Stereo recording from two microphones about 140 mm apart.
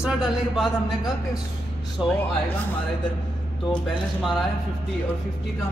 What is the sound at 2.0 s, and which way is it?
Speech, 5° right (ahead or behind).